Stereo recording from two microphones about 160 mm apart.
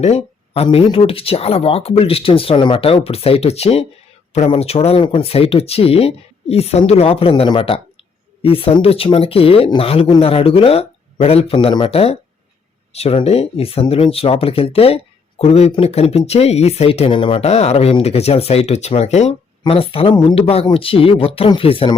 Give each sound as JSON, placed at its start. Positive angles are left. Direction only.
{"t": 0.0, "sound": "speech", "side_deg": 40}